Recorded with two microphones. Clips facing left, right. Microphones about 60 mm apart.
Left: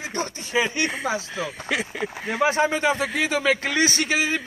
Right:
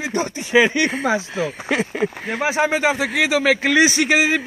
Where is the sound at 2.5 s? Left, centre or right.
Right.